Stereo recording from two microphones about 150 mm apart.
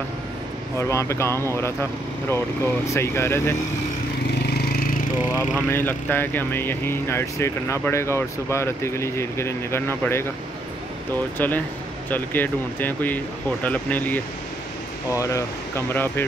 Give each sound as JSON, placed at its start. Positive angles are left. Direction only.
{"t": 0.7, "sound": "speech", "side_deg": 20}
{"t": 4.6, "sound": "a sound", "side_deg": 90}
{"t": 5.7, "sound": "speech", "side_deg": 15}
{"t": 11.3, "sound": "speech", "side_deg": 10}